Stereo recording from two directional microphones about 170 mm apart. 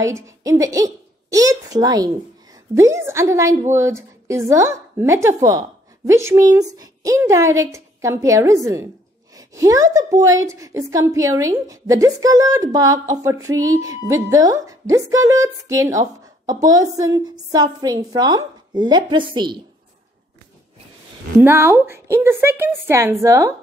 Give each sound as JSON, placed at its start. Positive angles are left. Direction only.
{"t": 0.0, "sound": "a woman's voice", "side_deg": -20}
{"t": 21.4, "sound": "a woman's voice", "side_deg": -15}